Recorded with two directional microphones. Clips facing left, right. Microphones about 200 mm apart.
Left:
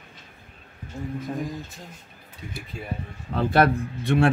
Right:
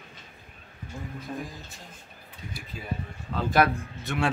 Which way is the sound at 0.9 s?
25° left (ahead or behind).